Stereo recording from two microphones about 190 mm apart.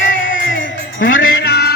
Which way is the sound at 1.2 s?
55° left (ahead or behind).